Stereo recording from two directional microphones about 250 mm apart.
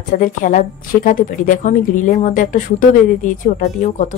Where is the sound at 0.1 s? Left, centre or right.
Left.